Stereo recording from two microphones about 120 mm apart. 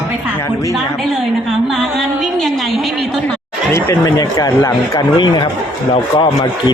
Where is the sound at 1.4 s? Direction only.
Centre (ahead or behind).